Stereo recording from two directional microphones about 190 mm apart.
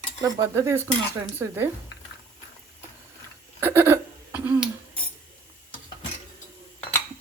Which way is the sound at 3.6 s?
10° right (ahead or behind).